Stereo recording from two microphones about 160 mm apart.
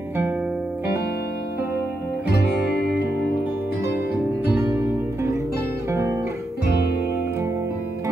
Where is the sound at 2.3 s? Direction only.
90° left.